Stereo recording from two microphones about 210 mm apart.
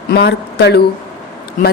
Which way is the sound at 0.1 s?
50° left (ahead or behind).